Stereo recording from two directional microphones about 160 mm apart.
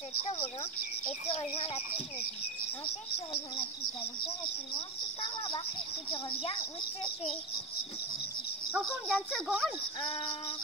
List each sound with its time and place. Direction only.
1.3 s speech: 40° left (ahead or behind)
4.7 s speech: 30° left (ahead or behind)
8.7 s a child's voice: 5° right (ahead or behind)